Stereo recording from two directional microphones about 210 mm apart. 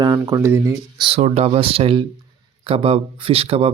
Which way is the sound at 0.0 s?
15° right (ahead or behind).